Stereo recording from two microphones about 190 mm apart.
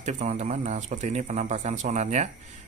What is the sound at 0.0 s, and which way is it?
A man's voice, 35° right (ahead or behind).